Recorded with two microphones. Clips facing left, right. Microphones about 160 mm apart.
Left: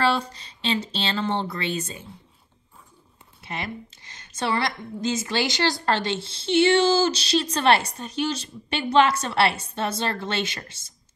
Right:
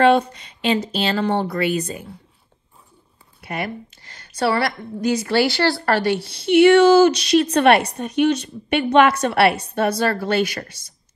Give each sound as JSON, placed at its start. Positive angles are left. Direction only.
{"t": 0.0, "sound": "a woman's voice", "side_deg": 35}
{"t": 3.3, "sound": "a woman's voice", "side_deg": 25}